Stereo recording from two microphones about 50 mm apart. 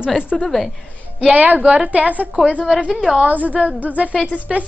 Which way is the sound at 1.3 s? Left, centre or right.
Right.